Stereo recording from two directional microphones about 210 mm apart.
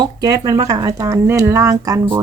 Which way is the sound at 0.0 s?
20° right (ahead or behind).